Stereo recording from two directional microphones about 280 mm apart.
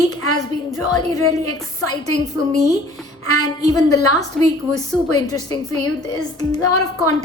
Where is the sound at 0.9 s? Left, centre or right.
Centre.